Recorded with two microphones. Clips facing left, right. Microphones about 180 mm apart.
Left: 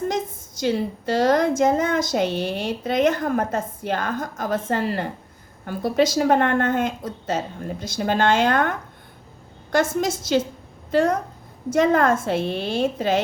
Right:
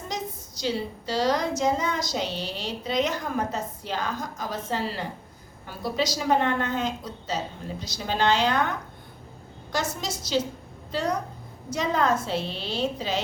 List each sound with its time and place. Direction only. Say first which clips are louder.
0.6 s a woman's voice: left 6 dB; 50° left (ahead or behind)
9.7 s a woman's voice: left 9 dB; 50° left (ahead or behind)